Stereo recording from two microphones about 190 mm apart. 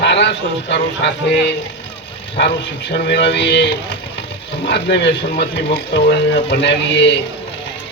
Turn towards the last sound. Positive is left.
turn(degrees=70)  # may be behind; listen again after turning